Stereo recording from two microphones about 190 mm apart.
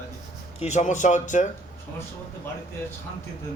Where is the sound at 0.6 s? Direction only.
35° left (ahead or behind).